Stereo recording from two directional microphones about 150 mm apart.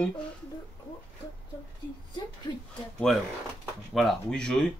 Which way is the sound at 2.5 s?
35° left (ahead or behind).